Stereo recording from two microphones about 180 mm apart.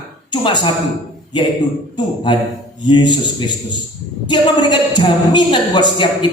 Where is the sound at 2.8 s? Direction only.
25° left (ahead or behind).